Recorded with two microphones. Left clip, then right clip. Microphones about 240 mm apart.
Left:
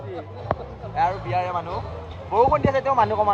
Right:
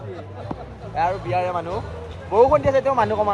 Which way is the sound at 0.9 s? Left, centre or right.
Right.